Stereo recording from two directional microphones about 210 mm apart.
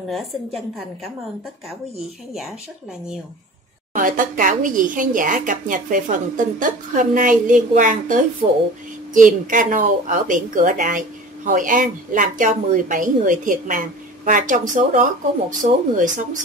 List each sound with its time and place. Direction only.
3.9 s a woman's voice: 40° right (ahead or behind)
8.4 s speech: 25° right (ahead or behind)
9.1 s a woman's voice: 40° right (ahead or behind)